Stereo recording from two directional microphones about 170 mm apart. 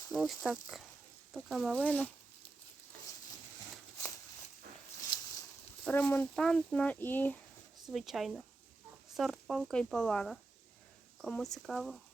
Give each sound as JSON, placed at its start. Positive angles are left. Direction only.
{"t": 0.1, "sound": "speech", "side_deg": 0}
{"t": 5.1, "sound": "a sound", "side_deg": 25}
{"t": 5.8, "sound": "speech", "side_deg": 10}
{"t": 7.9, "sound": "speech", "side_deg": 0}